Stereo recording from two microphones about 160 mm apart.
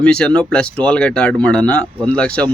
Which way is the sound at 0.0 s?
5° left (ahead or behind).